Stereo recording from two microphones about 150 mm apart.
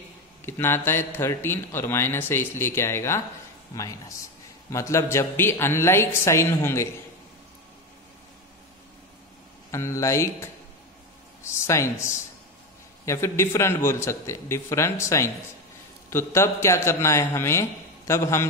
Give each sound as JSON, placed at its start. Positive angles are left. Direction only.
{"t": 0.5, "sound": "speech", "side_deg": 15}
{"t": 9.7, "sound": "speech", "side_deg": 20}